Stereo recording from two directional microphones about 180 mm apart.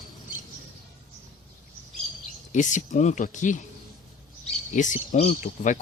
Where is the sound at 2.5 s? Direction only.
45° left (ahead or behind).